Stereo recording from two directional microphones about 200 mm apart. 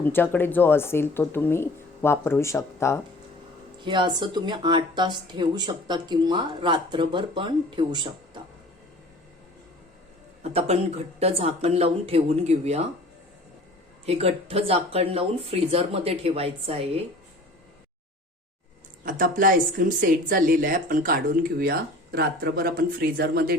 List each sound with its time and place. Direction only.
0.0 s speech: 10° left (ahead or behind)
3.8 s speech: 25° right (ahead or behind)
10.4 s speech: 30° right (ahead or behind)
14.0 s speech: 30° right (ahead or behind)
19.0 s speech: 45° right (ahead or behind)